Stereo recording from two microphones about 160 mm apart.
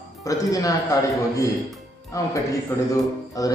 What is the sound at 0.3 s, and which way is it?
Mantra, 20° left (ahead or behind).